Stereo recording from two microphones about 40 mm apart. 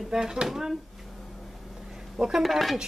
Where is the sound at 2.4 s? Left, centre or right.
Centre.